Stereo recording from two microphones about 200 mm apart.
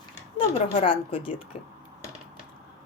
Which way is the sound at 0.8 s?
25° left (ahead or behind).